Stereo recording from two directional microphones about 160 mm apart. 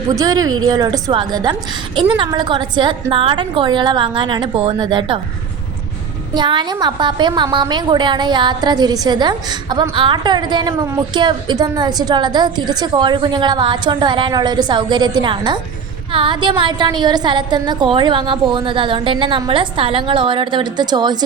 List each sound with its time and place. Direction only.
0.1 s a woman's voice: 25° right (ahead or behind)
6.3 s a woman's voice: 30° right (ahead or behind)